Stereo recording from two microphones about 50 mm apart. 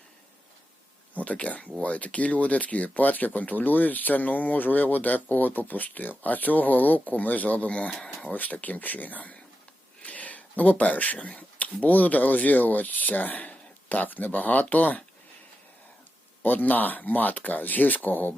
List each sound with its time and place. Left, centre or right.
1.1 s speech: left
16.4 s speech: left